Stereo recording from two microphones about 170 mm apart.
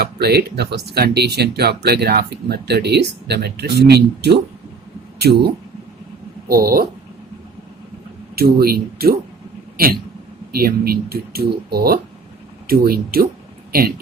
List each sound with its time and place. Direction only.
0.0 s speech: 70° right (ahead or behind)
6.5 s speech: 60° right (ahead or behind)
8.4 s speech: 65° right (ahead or behind)